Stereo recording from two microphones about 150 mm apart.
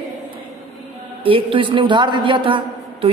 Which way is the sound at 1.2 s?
35° right (ahead or behind).